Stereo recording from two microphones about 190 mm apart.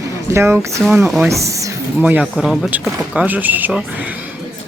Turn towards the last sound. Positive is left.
turn(degrees=-10)  # may be behind; listen again after turning